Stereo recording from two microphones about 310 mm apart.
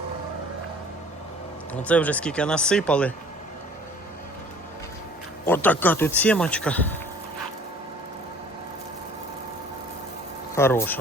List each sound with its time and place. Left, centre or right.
1.7 s speech: centre
5.5 s speech: centre
10.5 s speech: centre